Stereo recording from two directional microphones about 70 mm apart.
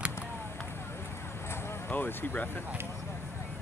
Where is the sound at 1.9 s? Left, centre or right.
Left.